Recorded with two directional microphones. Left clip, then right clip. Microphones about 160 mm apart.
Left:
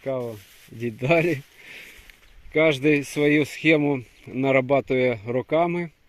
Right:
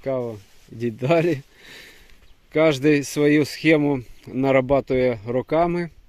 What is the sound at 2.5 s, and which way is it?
Speech, 25° right (ahead or behind).